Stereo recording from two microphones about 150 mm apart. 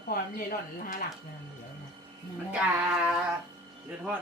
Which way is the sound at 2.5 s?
10° right (ahead or behind).